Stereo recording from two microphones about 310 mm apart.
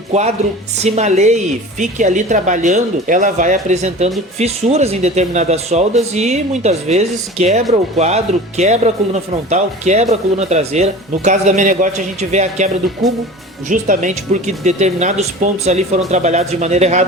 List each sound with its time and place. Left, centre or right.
0.1 s speech: right
13.0 s speech: centre
13.7 s speech: right